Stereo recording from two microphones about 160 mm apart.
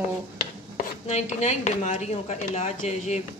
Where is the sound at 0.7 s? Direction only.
45° left (ahead or behind).